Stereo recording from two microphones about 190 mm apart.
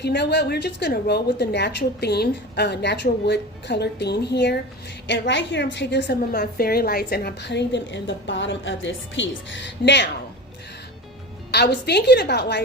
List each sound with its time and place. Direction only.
0.0 s a woman's voice: 65° left (ahead or behind)
11.5 s a woman's voice: 60° left (ahead or behind)